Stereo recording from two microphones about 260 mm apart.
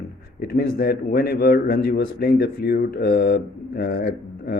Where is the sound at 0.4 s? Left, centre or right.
Left.